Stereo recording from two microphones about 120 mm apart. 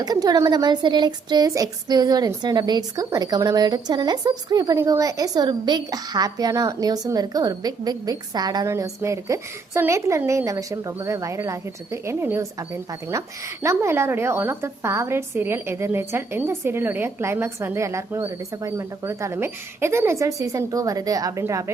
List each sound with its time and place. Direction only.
0.0 s a woman's voice: 35° right (ahead or behind)